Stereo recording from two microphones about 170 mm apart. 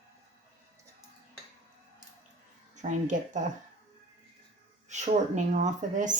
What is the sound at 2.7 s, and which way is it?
Speech, 45° right (ahead or behind).